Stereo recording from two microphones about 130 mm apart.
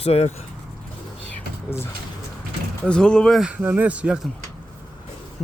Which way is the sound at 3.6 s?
15° right (ahead or behind).